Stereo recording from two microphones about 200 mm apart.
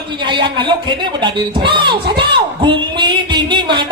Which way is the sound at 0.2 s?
25° right (ahead or behind).